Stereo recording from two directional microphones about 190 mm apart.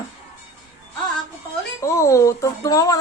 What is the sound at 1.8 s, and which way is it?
A man's voice, 15° left (ahead or behind).